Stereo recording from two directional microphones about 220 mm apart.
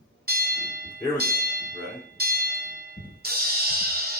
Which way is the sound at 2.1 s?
45° right (ahead or behind).